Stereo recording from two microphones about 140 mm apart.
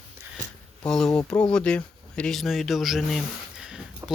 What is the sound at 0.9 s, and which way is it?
Speech, 5° left (ahead or behind).